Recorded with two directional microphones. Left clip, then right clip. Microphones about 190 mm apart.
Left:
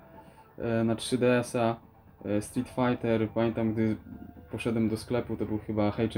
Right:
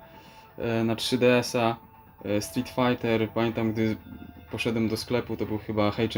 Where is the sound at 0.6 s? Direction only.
10° right (ahead or behind).